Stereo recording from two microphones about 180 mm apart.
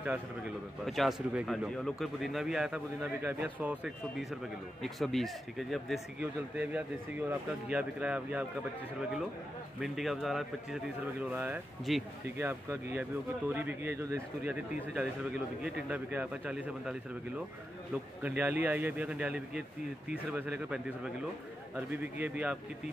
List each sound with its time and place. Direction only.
0.8 s speech: centre (ahead or behind)
9.8 s speech: centre (ahead or behind)
17.9 s speech: 10° right (ahead or behind)